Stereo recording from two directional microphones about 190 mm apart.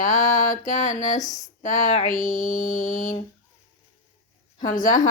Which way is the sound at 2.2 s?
45° left (ahead or behind).